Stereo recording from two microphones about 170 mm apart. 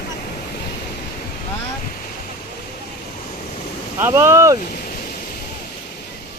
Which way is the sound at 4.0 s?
15° right (ahead or behind).